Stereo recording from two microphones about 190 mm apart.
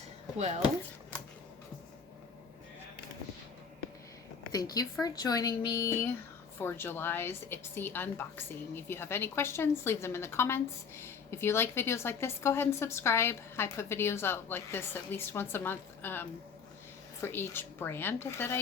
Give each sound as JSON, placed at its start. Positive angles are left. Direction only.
{"t": 0.3, "sound": "speech", "side_deg": -35}
{"t": 4.5, "sound": "a woman's voice", "side_deg": 20}